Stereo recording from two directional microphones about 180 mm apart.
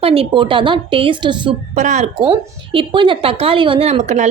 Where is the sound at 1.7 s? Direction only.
40° right (ahead or behind).